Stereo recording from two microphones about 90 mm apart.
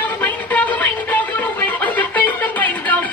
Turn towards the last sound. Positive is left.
turn(degrees=20)  # may be behind; listen again after turning